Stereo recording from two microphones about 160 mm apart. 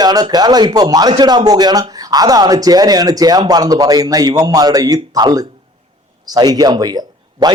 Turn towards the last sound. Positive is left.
turn(degrees=-25)  # may be behind; listen again after turning